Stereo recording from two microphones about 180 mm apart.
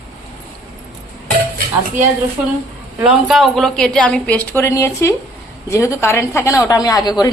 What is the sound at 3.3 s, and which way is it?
A woman's voice, centre (ahead or behind).